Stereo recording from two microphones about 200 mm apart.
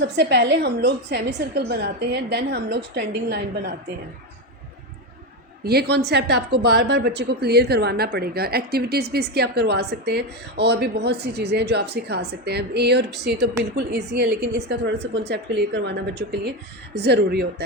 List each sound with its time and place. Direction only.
0.0 s a woman's voice: 60° right (ahead or behind)
5.6 s a woman's voice: 55° right (ahead or behind)